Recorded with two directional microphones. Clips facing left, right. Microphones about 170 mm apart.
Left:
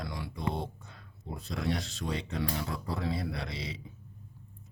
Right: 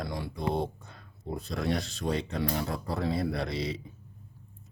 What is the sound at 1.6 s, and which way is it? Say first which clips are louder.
Speech: right 3 dB; 40° right (ahead or behind).